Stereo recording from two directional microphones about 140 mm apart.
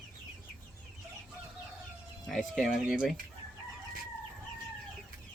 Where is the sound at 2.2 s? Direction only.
5° left (ahead or behind).